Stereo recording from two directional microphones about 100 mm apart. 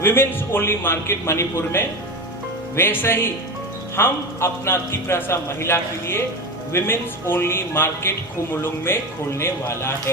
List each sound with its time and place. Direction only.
0.0 s a man's voice: 20° left (ahead or behind)